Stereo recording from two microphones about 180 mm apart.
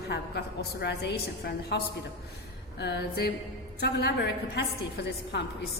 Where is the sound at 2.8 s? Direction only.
65° left (ahead or behind).